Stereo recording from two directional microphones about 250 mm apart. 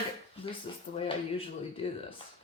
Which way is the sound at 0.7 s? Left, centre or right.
Centre.